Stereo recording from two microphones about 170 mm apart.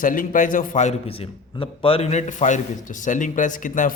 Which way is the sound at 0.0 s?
55° left (ahead or behind).